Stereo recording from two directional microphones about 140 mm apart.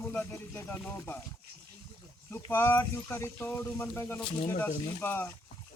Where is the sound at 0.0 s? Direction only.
10° left (ahead or behind).